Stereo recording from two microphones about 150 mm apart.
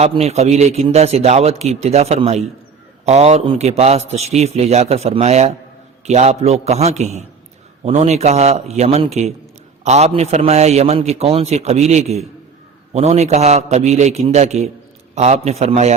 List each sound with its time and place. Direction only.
0.0 s a man's voice: 45° right (ahead or behind)